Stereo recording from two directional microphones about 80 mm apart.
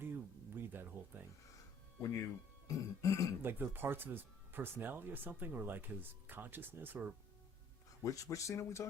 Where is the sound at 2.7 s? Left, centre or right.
Left.